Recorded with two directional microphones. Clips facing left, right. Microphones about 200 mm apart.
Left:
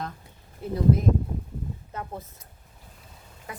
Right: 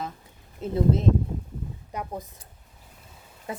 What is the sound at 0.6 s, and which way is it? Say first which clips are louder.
Speech: right 1 dB; 20° right (ahead or behind).